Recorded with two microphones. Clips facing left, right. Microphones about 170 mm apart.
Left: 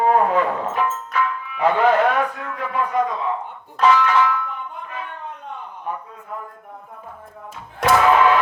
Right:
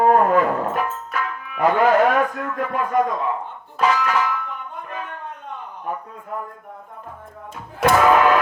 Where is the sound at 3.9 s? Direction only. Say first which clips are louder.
Left 4 dB; 40° right (ahead or behind).